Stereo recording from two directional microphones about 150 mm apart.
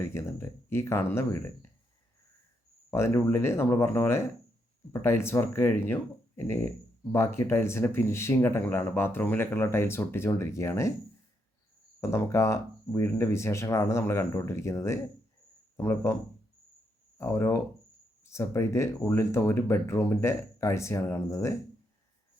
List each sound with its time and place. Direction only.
0.0 s speech: 15° left (ahead or behind)
2.9 s speech: 15° left (ahead or behind)
11.9 s speech: 20° left (ahead or behind)
17.2 s speech: 15° left (ahead or behind)